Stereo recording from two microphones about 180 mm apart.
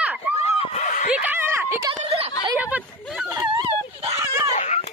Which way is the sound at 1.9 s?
35° right (ahead or behind).